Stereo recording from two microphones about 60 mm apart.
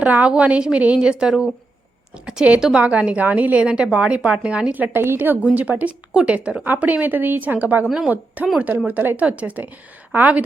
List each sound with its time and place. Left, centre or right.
0.0 s a woman's voice: right
2.8 s a woman's voice: right
4.9 s a woman's voice: right
7.9 s speech: centre
8.5 s a woman's voice: right